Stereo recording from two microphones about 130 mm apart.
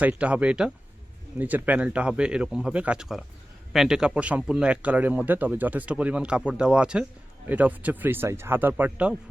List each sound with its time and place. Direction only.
0.0 s speech: 10° right (ahead or behind)